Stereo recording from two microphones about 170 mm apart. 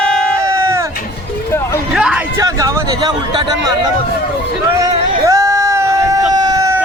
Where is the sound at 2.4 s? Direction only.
20° right (ahead or behind).